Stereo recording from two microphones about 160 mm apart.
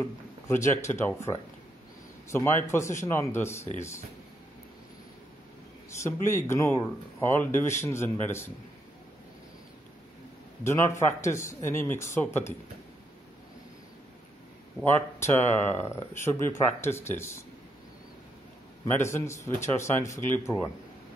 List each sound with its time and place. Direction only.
0.0 s speech: 15° left (ahead or behind)
6.2 s speech: 15° left (ahead or behind)
10.6 s speech: 15° left (ahead or behind)
15.1 s speech: 15° left (ahead or behind)
18.9 s speech: 15° left (ahead or behind)